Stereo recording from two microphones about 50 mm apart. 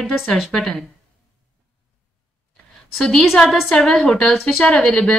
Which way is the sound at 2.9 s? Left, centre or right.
Centre.